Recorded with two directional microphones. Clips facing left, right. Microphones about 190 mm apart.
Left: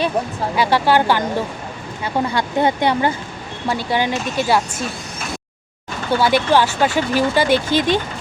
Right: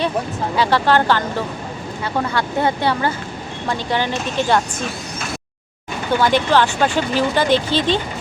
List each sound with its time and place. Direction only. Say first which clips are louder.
0.5 s speech: even; 15° left (ahead or behind)
2.3 s speech: left 2 dB; 15° left (ahead or behind)
6.1 s speech: left 1 dB; 10° left (ahead or behind)